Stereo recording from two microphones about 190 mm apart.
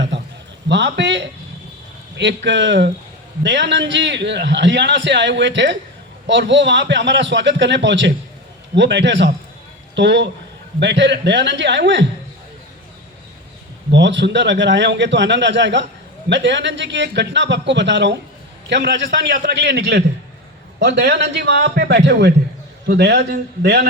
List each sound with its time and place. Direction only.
0.7 s a man's voice: 65° right (ahead or behind)
13.9 s a man's voice: 70° right (ahead or behind)